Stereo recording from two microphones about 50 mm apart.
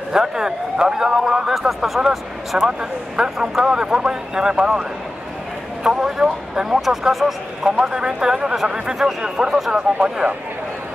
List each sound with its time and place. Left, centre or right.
0.1 s speech: centre
5.9 s speech: centre
7.8 s speech: centre